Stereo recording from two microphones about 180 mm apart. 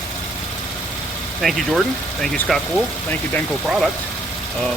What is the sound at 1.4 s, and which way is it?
Speech, centre (ahead or behind).